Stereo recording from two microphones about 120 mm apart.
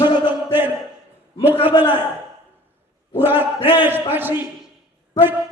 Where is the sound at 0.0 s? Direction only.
15° right (ahead or behind).